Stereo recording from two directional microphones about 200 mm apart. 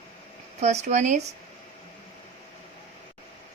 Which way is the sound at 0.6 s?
35° right (ahead or behind).